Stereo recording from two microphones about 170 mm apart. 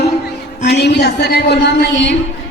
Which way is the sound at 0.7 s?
75° left (ahead or behind).